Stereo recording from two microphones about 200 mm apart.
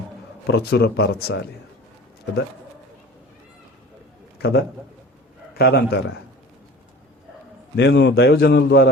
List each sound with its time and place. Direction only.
0.4 s a man's voice: 55° left (ahead or behind)
4.4 s a man's voice: 55° left (ahead or behind)
7.8 s a man's voice: 60° left (ahead or behind)